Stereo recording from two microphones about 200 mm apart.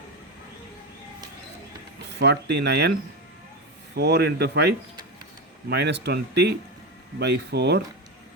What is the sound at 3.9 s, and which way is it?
Speech, 55° right (ahead or behind).